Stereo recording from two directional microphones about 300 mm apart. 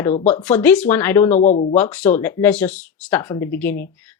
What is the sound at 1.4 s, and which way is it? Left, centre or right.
Speech, left.